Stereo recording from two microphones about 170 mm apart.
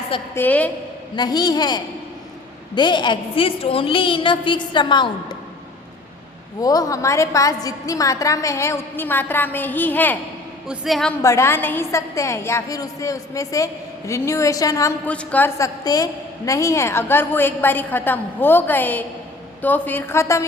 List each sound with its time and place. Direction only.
0.3 s a woman's voice: 10° left (ahead or behind)
1.1 s a woman's voice: 25° left (ahead or behind)
6.6 s a woman's voice: 20° left (ahead or behind); by 11.1 s centre (ahead or behind)
11.2 s a woman's voice: 15° left (ahead or behind)